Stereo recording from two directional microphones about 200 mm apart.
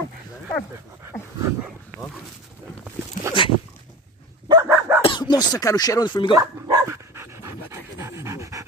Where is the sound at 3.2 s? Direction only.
40° left (ahead or behind).